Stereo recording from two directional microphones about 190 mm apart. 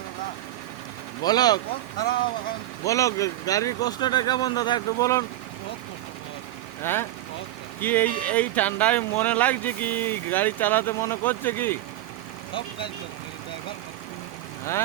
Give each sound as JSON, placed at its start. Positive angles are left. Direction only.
{"t": 1.2, "sound": "speech", "side_deg": 20}
{"t": 6.8, "sound": "speech", "side_deg": 10}